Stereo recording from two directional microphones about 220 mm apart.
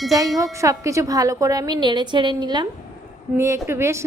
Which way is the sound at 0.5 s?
15° right (ahead or behind).